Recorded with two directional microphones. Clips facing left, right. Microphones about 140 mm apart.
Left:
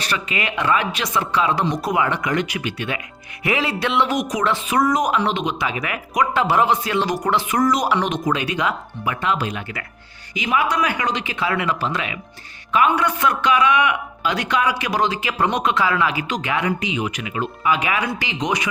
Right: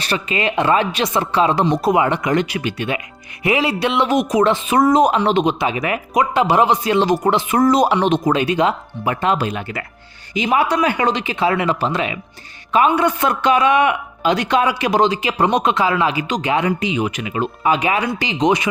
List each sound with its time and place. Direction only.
0.0 s speech: 30° right (ahead or behind)
5.5 s speech: 25° right (ahead or behind)